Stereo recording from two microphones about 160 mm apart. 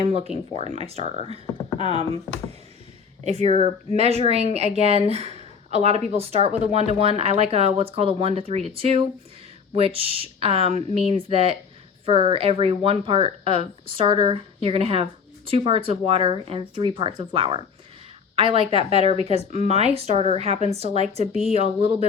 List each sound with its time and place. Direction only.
0.0 s speech: 40° right (ahead or behind)
3.2 s speech: 40° right (ahead or behind)